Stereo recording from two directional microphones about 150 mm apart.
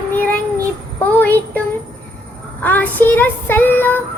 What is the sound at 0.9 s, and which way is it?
Child singing, 10° left (ahead or behind).